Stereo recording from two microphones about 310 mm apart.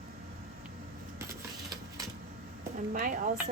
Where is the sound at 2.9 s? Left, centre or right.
Right.